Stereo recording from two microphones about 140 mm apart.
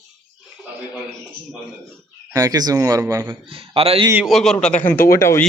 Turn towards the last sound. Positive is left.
turn(degrees=20)  # may be behind; listen again after turning